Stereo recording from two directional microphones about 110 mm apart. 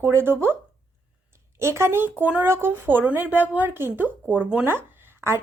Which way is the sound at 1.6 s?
25° right (ahead or behind).